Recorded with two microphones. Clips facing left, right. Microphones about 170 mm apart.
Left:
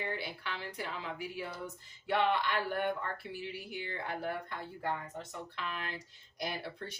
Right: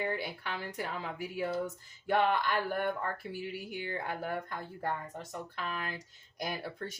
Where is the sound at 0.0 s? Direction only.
45° right (ahead or behind).